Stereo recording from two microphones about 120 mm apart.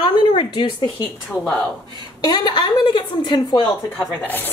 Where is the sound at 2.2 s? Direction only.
35° left (ahead or behind).